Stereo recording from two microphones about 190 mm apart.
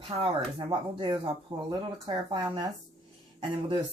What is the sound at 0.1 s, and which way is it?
Speech, 35° right (ahead or behind).